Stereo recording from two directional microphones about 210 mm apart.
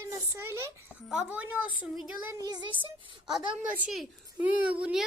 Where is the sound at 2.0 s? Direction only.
10° right (ahead or behind).